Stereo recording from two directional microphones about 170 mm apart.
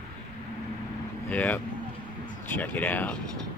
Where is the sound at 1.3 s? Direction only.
10° left (ahead or behind).